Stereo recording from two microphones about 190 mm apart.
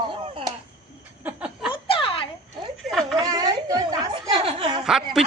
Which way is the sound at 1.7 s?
30° left (ahead or behind).